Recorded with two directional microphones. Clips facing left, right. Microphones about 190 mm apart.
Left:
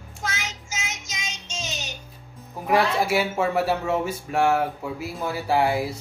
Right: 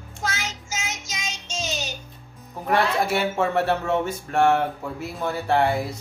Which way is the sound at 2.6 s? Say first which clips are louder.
Left 1 dB; 5° left (ahead or behind).